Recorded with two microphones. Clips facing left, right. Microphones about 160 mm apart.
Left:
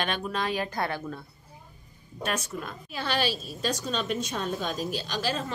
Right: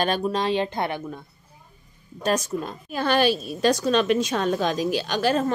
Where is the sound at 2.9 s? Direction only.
50° right (ahead or behind).